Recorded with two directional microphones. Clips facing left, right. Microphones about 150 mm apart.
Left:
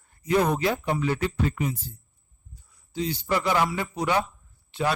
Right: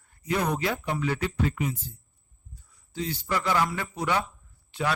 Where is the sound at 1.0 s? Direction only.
30° left (ahead or behind).